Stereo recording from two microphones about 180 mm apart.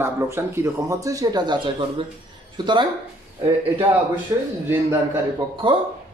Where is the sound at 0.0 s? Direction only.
15° right (ahead or behind).